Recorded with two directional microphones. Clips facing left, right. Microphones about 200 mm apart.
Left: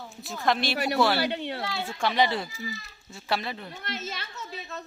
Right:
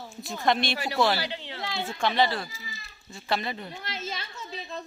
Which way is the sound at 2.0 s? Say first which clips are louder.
Even; 10° left (ahead or behind).